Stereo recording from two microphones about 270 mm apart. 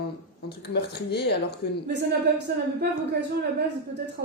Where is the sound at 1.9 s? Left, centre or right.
Right.